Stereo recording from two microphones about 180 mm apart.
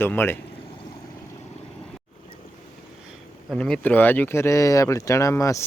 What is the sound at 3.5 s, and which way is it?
Speech, 5° left (ahead or behind).